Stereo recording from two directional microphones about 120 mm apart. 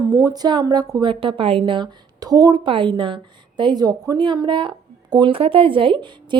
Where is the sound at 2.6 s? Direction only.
45° right (ahead or behind).